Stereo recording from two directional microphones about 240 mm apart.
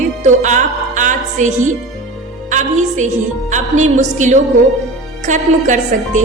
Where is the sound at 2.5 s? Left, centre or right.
Right.